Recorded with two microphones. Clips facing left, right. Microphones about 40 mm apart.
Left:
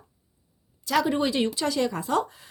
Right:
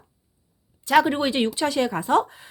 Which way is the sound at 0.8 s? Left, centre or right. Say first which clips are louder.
Right 5 dB; right.